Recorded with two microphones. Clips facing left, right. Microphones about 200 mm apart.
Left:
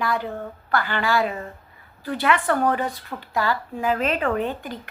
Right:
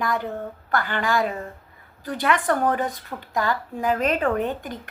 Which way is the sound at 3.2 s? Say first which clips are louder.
Even; 45° right (ahead or behind).